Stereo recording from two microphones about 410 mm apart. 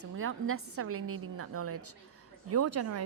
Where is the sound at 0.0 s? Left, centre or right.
Right.